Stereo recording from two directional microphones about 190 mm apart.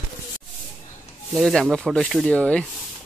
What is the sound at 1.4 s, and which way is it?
Speech, centre (ahead or behind).